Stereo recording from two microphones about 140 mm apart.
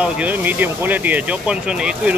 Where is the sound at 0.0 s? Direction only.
10° right (ahead or behind).